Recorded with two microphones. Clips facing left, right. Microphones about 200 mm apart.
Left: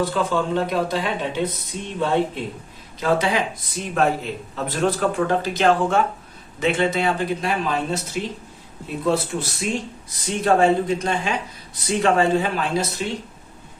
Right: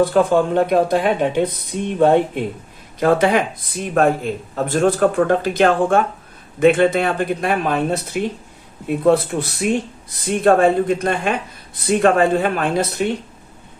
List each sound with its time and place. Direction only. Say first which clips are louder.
0.0 s speech: right 7 dB; 55° right (ahead or behind)